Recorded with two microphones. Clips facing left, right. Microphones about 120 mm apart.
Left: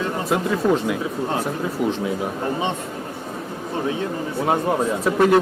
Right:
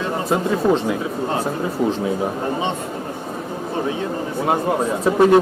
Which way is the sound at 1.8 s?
5° left (ahead or behind).